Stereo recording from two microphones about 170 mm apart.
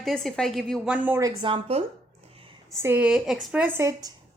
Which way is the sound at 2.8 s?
10° right (ahead or behind).